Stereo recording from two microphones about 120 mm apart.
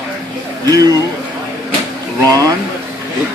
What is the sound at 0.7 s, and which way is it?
Speech, 30° right (ahead or behind).